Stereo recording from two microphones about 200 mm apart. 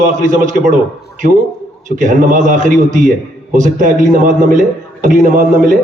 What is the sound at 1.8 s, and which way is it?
A man's voice, 40° right (ahead or behind).